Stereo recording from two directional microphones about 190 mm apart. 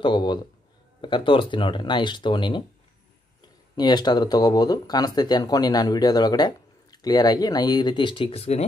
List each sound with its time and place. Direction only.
0.0 s speech: 25° left (ahead or behind)
3.7 s speech: 20° left (ahead or behind)